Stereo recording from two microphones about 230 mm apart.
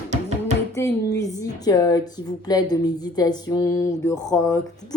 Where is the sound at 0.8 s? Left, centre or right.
Centre.